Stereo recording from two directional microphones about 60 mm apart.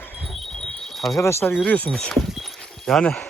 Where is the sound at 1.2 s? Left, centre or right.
Left.